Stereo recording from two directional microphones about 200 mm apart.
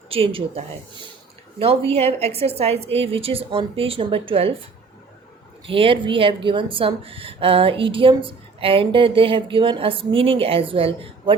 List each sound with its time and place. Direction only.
0.1 s a woman's voice: 25° right (ahead or behind)
1.9 s a woman's voice: 30° right (ahead or behind)
5.6 s a woman's voice: 25° right (ahead or behind)